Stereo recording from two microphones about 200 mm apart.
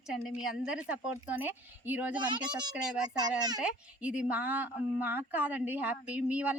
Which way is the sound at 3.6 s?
5° right (ahead or behind).